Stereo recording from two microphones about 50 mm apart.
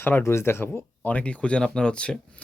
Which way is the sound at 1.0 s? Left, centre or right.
Left.